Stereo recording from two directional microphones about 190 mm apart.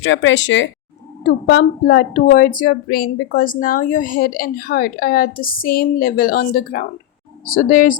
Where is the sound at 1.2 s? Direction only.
55° left (ahead or behind).